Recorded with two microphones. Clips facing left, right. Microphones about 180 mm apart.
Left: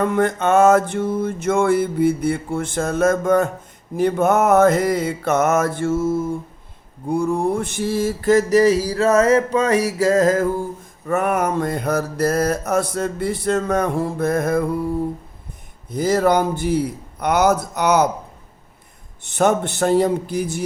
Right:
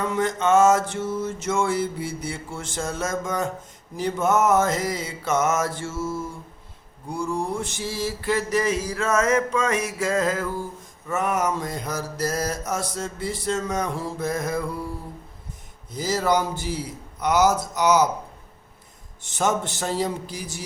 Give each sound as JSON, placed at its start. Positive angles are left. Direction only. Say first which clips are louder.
{"t": 0.0, "sound": "mantra", "louder": "left 5 dB", "side_deg": 55}
{"t": 11.0, "sound": "mantra", "louder": "left 5 dB", "side_deg": 55}
{"t": 15.9, "sound": "mantra", "louder": "left 6 dB", "side_deg": 55}
{"t": 19.2, "sound": "mantra", "louder": "left 6 dB", "side_deg": 60}